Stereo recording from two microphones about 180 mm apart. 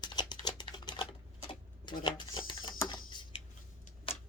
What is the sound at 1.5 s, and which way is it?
Bird, 25° left (ahead or behind).